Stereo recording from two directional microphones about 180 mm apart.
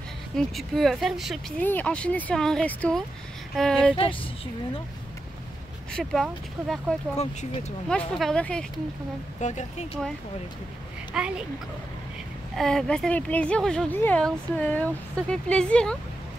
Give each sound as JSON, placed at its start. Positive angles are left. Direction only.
{"t": 0.4, "sound": "speech", "side_deg": 0}
{"t": 1.6, "sound": "speech", "side_deg": 10}
{"t": 3.9, "sound": "speech", "side_deg": 30}
{"t": 5.9, "sound": "speech", "side_deg": 0}
{"t": 7.2, "sound": "speech", "side_deg": 40}
{"t": 8.2, "sound": "speech", "side_deg": 5}
{"t": 9.4, "sound": "speech", "side_deg": 40}
{"t": 11.1, "sound": "speech", "side_deg": -5}
{"t": 12.5, "sound": "speech", "side_deg": 0}